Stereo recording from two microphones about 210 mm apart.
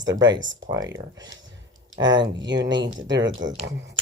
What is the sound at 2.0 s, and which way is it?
Speech, 20° right (ahead or behind).